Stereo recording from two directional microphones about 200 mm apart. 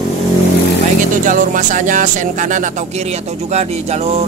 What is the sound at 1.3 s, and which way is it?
Speech, 40° right (ahead or behind).